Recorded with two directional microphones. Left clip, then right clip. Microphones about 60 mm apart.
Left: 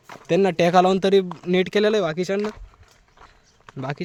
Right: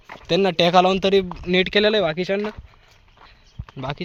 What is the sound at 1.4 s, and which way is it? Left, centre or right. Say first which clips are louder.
Speech: right 2 dB; left.